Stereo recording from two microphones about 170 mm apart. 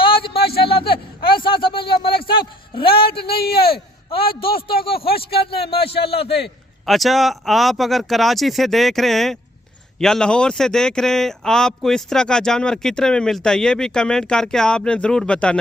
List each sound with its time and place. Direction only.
0.0 s a sound: 30° left (ahead or behind)
3.4 s speech: 65° left (ahead or behind)
4.1 s a man's voice: 30° left (ahead or behind)
5.0 s speech: 65° left (ahead or behind)
5.9 s a man's voice: 35° left (ahead or behind)
6.8 s a man's voice: centre (ahead or behind)